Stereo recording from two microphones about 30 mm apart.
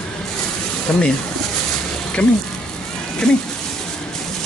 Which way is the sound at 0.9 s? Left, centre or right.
Left.